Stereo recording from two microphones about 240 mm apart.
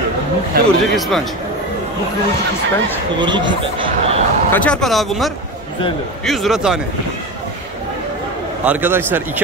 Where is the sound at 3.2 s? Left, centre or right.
Centre.